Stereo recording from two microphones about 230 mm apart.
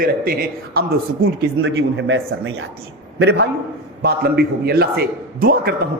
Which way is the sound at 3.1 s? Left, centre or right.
Right.